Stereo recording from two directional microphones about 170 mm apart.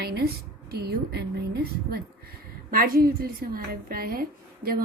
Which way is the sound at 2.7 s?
55° right (ahead or behind).